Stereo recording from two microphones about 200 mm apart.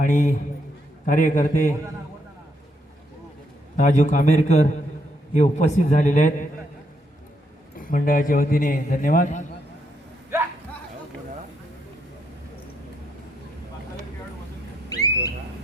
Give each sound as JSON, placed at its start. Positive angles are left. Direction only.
{"t": 0.0, "sound": "a man's voice", "side_deg": 40}
{"t": 3.8, "sound": "a man's voice", "side_deg": 40}
{"t": 7.8, "sound": "a man's voice", "side_deg": 45}
{"t": 14.8, "sound": "a sound", "side_deg": 20}